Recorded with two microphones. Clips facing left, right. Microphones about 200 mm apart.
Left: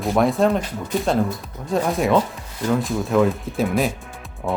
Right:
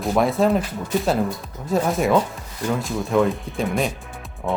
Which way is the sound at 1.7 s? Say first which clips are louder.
Even; centre (ahead or behind).